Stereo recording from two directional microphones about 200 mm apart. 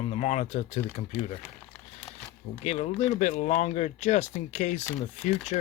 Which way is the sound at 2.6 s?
35° left (ahead or behind).